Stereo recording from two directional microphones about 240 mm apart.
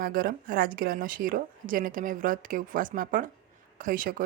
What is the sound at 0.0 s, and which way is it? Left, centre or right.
A woman's voice, right.